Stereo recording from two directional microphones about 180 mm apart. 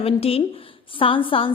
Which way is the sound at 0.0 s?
35° left (ahead or behind).